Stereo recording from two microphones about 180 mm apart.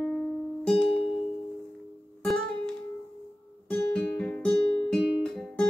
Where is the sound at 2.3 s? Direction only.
5° left (ahead or behind).